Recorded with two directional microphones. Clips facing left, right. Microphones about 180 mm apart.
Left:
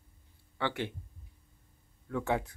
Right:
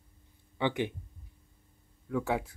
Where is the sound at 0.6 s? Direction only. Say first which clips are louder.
Right 4 dB; 15° right (ahead or behind).